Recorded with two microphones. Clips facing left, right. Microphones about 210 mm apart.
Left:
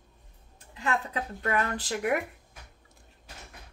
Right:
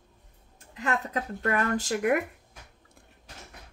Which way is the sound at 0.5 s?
45° right (ahead or behind).